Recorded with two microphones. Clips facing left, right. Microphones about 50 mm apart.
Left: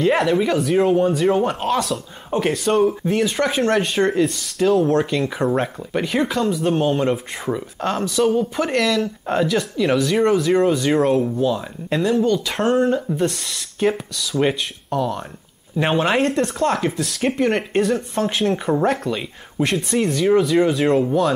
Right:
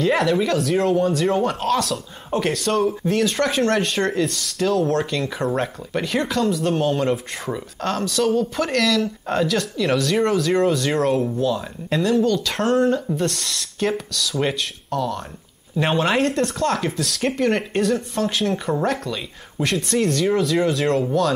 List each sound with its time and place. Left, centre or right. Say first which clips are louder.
0.3 s speech: left 1 dB; centre
1.8 s speech: left 1 dB; centre
2.4 s speech: left 3 dB; centre
11.3 s speech: left 2 dB; left
12.8 s speech: left 1 dB; left
15.7 s speech: left 1 dB; centre
16.1 s speech: left 1 dB; left; by 21.1 s centre